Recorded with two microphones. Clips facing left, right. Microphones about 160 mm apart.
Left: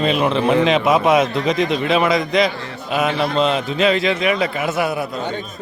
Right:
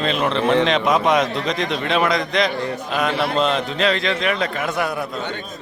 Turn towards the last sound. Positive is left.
turn(degrees=5)  # may be behind; listen again after turning